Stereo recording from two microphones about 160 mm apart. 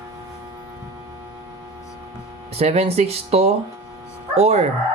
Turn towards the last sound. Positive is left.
turn(degrees=-40)  # may be behind; listen again after turning